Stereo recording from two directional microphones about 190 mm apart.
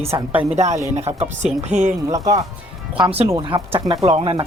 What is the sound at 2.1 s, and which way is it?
Speech, 15° right (ahead or behind).